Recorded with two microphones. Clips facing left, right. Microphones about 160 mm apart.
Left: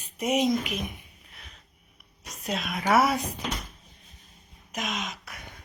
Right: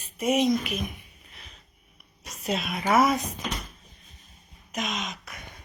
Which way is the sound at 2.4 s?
Centre (ahead or behind).